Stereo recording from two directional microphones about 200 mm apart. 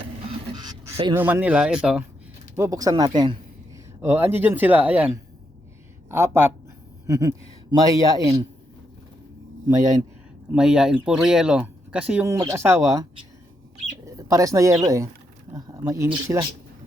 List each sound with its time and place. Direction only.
0.3 s a sound: 20° right (ahead or behind)
1.1 s speech: 10° right (ahead or behind)
2.6 s speech: 15° right (ahead or behind)
4.0 s speech: 10° right (ahead or behind)
9.6 s speech: 20° right (ahead or behind)
10.5 s speech: 5° right (ahead or behind)
14.2 s speech: 15° right (ahead or behind)